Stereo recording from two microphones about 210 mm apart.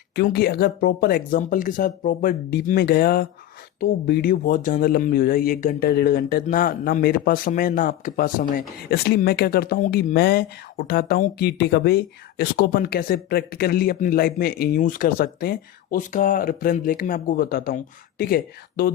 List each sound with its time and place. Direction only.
0.2 s speech: 50° left (ahead or behind)